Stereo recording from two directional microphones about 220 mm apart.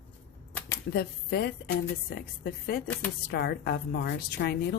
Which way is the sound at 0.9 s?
45° left (ahead or behind).